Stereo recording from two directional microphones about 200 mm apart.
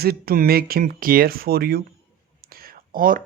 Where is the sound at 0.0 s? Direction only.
50° right (ahead or behind).